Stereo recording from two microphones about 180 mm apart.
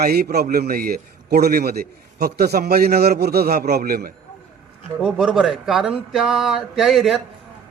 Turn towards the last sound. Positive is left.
turn(degrees=0)  # may be behind; listen again after turning